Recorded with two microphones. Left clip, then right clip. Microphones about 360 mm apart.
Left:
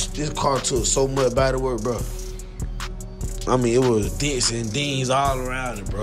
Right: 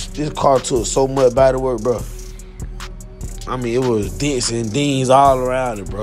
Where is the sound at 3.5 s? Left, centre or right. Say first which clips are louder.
Even; centre.